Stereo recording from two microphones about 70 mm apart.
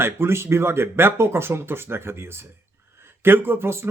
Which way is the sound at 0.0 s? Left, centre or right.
Right.